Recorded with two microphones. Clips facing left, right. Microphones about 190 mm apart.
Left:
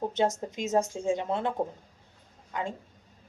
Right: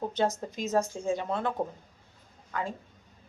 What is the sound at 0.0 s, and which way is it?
Speech, 20° left (ahead or behind).